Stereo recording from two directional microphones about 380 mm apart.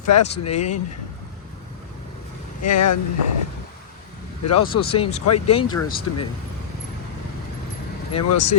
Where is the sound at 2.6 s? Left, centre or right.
Left.